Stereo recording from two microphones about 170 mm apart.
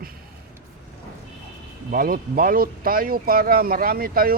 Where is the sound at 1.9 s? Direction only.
60° right (ahead or behind).